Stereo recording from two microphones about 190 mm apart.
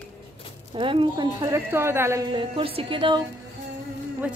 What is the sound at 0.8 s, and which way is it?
A woman's voice, 25° right (ahead or behind).